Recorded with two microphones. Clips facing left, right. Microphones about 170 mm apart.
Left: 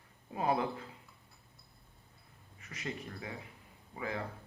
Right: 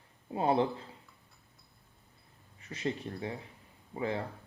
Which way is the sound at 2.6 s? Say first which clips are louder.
Right 7 dB; 30° right (ahead or behind).